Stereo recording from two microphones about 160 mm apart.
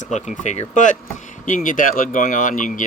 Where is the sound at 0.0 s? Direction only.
50° left (ahead or behind).